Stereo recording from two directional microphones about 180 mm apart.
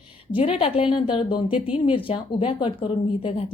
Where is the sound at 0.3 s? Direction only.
30° left (ahead or behind).